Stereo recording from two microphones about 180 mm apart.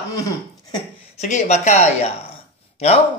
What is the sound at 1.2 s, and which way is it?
Speech, 40° left (ahead or behind).